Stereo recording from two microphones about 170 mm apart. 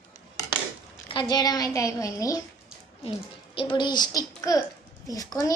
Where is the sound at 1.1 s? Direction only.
25° left (ahead or behind).